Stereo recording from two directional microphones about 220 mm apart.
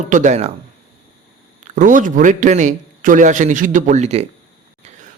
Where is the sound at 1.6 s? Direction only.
35° right (ahead or behind).